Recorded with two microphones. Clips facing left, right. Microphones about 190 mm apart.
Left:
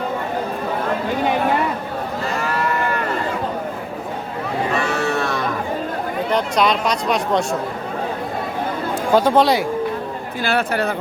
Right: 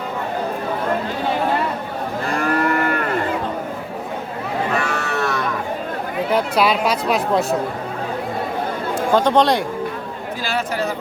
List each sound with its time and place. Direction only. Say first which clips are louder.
2.4 s moo: right 5 dB; 55° right (ahead or behind)
6.3 s speech: right 1 dB; 5° right (ahead or behind)
9.1 s speech: left 1 dB; 5° left (ahead or behind)
10.4 s speech: left 3 dB; 60° left (ahead or behind)